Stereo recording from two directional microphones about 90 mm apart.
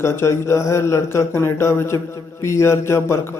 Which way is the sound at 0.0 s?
30° left (ahead or behind).